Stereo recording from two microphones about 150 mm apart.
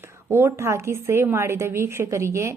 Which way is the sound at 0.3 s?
15° right (ahead or behind).